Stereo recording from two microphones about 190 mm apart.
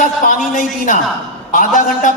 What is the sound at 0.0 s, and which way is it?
A woman's voice, 45° left (ahead or behind).